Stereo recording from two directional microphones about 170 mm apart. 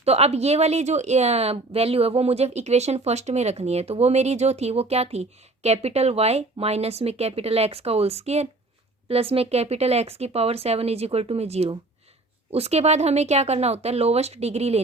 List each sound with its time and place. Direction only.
0.0 s speech: 35° right (ahead or behind)